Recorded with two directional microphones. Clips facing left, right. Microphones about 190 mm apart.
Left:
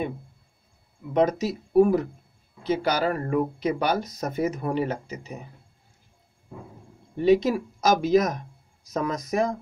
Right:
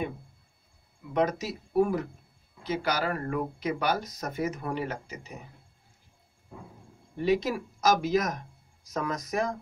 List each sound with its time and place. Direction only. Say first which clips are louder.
1.1 s speech: left 5 dB; 25° left (ahead or behind)
7.2 s speech: left 6 dB; 25° left (ahead or behind)